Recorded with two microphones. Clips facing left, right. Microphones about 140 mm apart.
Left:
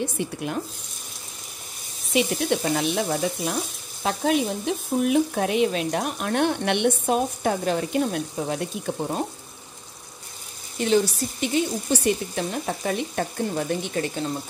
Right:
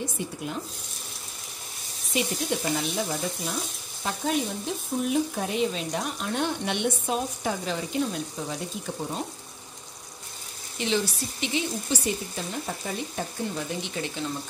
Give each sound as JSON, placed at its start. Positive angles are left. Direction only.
{"t": 0.2, "sound": "speech", "side_deg": 75}
{"t": 2.1, "sound": "speech", "side_deg": 70}
{"t": 4.0, "sound": "stir", "side_deg": 85}
{"t": 10.8, "sound": "speech", "side_deg": 45}
{"t": 11.4, "sound": "stir", "side_deg": 55}